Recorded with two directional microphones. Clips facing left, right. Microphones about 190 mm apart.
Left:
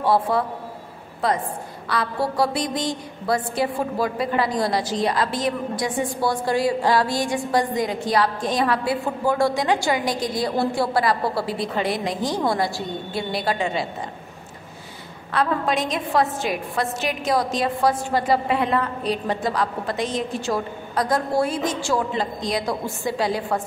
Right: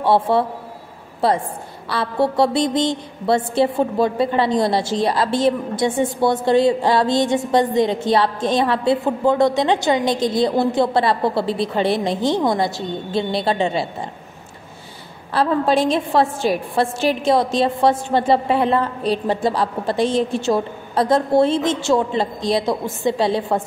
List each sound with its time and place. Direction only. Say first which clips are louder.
0.0 s a woman's voice: right 4 dB; 25° right (ahead or behind)
1.9 s a woman's voice: right 5 dB; 25° right (ahead or behind)
15.3 s a woman's voice: right 5 dB; 30° right (ahead or behind)